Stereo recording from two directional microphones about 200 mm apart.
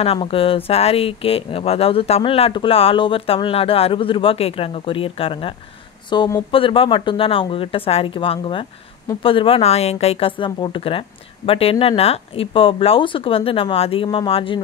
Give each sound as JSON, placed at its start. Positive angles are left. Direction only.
{"t": 0.0, "sound": "speech", "side_deg": 30}